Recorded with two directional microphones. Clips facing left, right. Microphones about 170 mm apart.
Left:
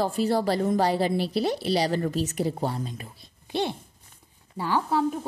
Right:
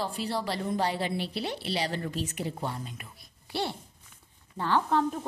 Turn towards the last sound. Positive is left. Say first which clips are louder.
# left 2 dB
turn(degrees=10)  # may be behind; listen again after turning